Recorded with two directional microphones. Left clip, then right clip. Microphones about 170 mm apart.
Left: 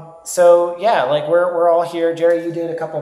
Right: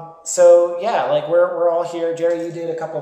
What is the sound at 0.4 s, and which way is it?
A man's voice, 25° left (ahead or behind).